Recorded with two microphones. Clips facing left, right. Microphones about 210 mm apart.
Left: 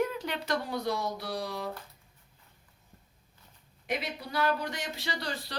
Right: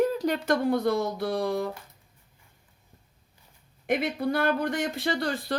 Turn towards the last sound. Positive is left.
turn(degrees=-50)  # may be behind; listen again after turning